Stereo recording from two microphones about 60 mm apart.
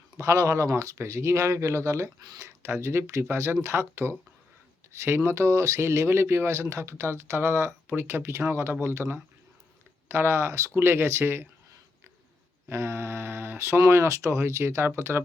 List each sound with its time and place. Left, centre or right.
0.2 s speech: right
12.6 s speech: right